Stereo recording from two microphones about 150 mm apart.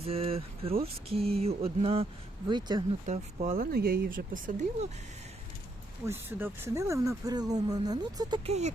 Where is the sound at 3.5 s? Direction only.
90° right; by 4.4 s 70° right (ahead or behind).